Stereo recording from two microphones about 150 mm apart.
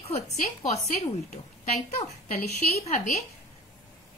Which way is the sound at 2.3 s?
85° left.